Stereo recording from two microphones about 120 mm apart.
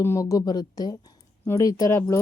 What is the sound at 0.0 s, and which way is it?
Speech, 25° left (ahead or behind).